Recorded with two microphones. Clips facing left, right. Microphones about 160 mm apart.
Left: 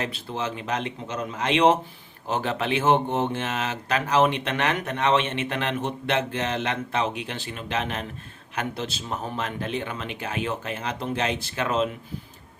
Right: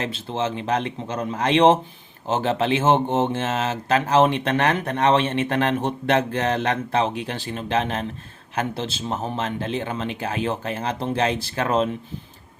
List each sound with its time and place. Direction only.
0.0 s speech: 25° right (ahead or behind)